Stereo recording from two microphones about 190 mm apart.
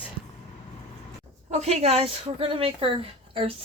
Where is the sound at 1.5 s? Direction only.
30° right (ahead or behind).